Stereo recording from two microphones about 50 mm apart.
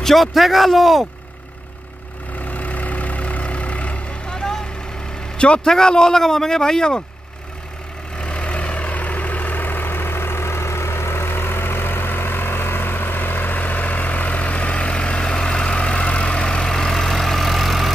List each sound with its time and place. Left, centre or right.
0.0 s a man's voice: centre
2.4 s vehicle: left
4.3 s vehicle: centre
5.4 s a man's voice: left
8.2 s vehicle: left; by 17.9 s centre